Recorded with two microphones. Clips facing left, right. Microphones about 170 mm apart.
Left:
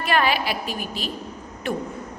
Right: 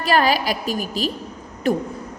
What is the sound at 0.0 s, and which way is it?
A woman's voice, 35° right (ahead or behind).